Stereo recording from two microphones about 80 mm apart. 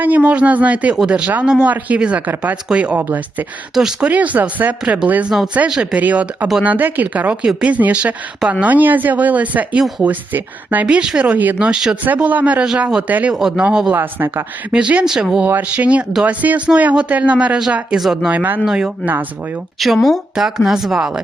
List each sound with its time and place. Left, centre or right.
0.0 s speech: centre
3.8 s speech: centre
4.1 s speech: centre
11.7 s speech: centre
12.0 s speech: right
13.9 s speech: right
14.7 s speech: centre
15.4 s speech: centre
17.9 s speech: centre
18.3 s speech: right
18.6 s speech: centre